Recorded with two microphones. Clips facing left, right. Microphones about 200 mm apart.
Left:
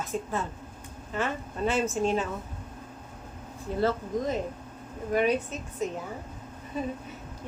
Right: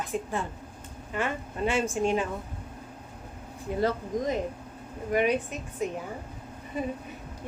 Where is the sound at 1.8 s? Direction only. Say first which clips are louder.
Even; 15° right (ahead or behind).